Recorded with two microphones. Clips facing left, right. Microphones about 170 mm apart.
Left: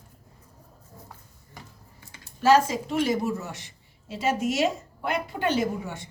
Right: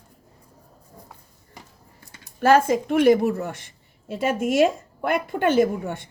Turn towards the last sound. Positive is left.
turn(degrees=-55)  # may be behind; listen again after turning